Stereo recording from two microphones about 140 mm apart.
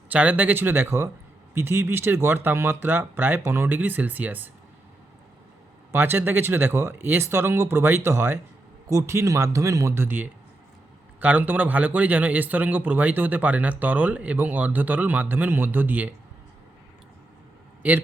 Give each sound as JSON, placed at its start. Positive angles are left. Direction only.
{"t": 0.1, "sound": "a man's voice", "side_deg": -10}
{"t": 5.9, "sound": "a man's voice", "side_deg": -15}
{"t": 17.8, "sound": "a man's voice", "side_deg": -10}